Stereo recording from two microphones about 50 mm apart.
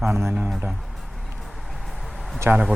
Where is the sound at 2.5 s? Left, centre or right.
Right.